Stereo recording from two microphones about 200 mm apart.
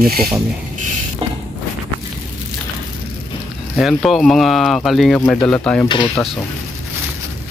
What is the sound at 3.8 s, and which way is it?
Speech, centre (ahead or behind).